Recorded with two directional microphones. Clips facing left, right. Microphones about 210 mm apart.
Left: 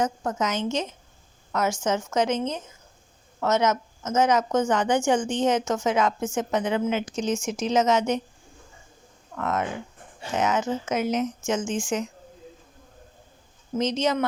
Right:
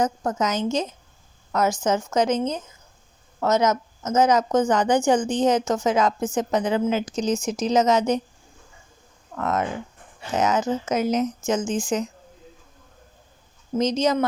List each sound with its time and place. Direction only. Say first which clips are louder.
0.0 s a woman's voice: right 3 dB; 40° right (ahead or behind)
9.3 s a woman's voice: right 2 dB; 40° right (ahead or behind)
13.7 s a woman's voice: right 3 dB; 40° right (ahead or behind)